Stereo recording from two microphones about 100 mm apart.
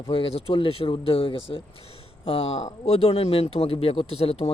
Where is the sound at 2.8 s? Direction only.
85° left.